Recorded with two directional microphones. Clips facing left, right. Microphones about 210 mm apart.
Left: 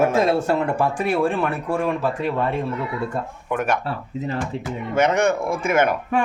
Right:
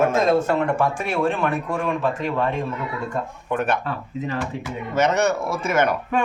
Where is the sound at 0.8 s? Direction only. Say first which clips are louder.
Left 2 dB; 35° left (ahead or behind).